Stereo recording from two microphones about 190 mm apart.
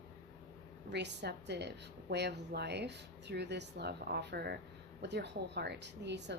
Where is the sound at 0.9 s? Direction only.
60° right (ahead or behind).